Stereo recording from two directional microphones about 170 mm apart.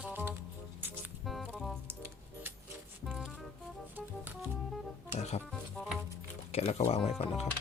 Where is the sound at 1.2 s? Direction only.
Centre (ahead or behind).